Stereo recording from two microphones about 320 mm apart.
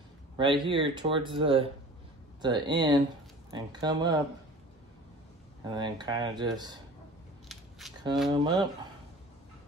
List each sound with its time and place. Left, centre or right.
0.4 s speech: centre
5.7 s speech: centre
7.8 s a sound: centre
8.3 s speech: centre